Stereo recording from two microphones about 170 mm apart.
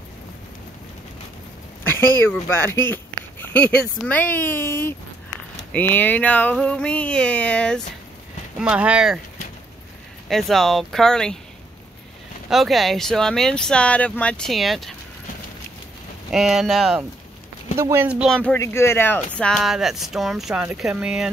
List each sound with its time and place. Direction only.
1.9 s speech: 15° left (ahead or behind)
8.5 s speech: 5° right (ahead or behind)
10.2 s speech: centre (ahead or behind)
12.4 s speech: centre (ahead or behind)
16.3 s speech: centre (ahead or behind)
17.7 s speech: 15° right (ahead or behind)
18.2 s speech: 5° left (ahead or behind)